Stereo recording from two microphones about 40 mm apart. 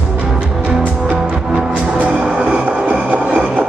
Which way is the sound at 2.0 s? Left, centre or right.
Right.